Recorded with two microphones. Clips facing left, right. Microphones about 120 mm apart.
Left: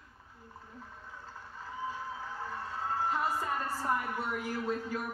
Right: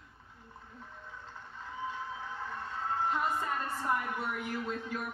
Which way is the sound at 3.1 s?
5° left (ahead or behind).